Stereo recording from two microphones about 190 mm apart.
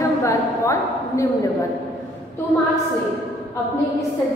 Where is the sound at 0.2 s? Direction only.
15° left (ahead or behind).